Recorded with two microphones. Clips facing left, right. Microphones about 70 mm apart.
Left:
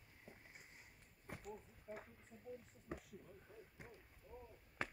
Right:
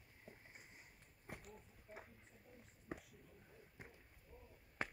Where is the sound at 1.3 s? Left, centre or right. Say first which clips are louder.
Left 3 dB; centre.